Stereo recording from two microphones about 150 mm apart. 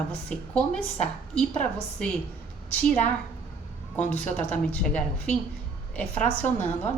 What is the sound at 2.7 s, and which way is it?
A woman's voice, 10° left (ahead or behind).